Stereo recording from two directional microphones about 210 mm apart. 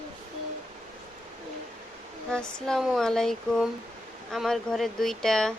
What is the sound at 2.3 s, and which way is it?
Speech, 5° left (ahead or behind).